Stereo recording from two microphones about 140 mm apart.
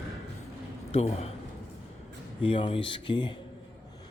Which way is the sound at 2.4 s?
40° left (ahead or behind).